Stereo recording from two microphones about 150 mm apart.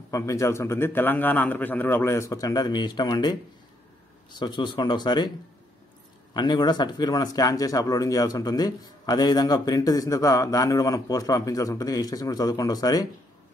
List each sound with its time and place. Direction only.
0.1 s speech: 20° left (ahead or behind)
4.4 s speech: 30° left (ahead or behind)
6.3 s speech: 30° left (ahead or behind)